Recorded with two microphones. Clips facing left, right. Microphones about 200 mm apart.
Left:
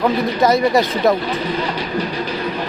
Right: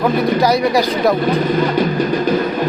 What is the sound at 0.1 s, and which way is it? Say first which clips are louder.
Speech: right 3 dB; 50° right (ahead or behind).